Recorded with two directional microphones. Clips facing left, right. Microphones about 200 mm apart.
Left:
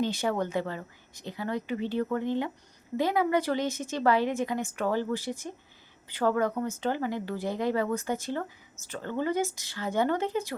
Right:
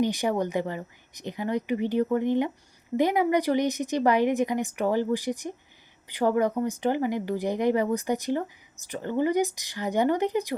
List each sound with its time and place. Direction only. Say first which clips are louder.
0.0 s speech: right 3 dB; 15° right (ahead or behind)